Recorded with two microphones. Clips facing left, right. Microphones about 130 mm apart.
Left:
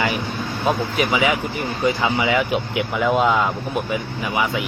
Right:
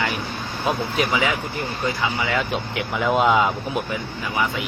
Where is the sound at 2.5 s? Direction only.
Centre (ahead or behind).